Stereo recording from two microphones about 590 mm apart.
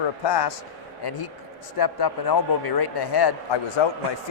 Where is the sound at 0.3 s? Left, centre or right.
Left.